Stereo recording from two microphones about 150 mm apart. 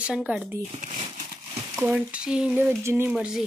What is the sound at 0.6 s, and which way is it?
Speech, 50° right (ahead or behind).